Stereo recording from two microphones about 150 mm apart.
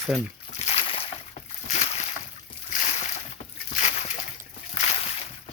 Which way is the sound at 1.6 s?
50° left (ahead or behind).